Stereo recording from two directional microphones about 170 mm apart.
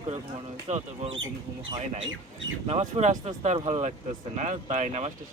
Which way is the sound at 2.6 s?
40° right (ahead or behind).